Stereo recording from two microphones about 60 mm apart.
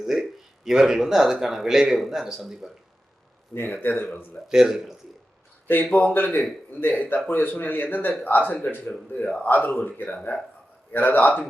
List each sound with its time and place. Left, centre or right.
0.0 s a man's voice: centre
3.5 s speech: left
4.4 s a man's voice: centre
5.8 s a man's voice: left